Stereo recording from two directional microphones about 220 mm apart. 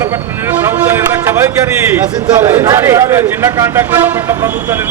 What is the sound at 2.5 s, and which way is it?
Speech, 10° right (ahead or behind).